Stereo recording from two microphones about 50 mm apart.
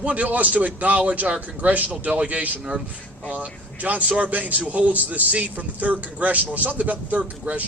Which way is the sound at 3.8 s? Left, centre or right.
Right.